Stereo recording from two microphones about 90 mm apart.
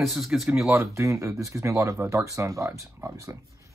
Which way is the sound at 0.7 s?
25° right (ahead or behind).